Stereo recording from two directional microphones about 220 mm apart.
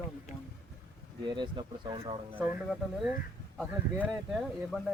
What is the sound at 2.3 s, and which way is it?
Speech, 10° right (ahead or behind).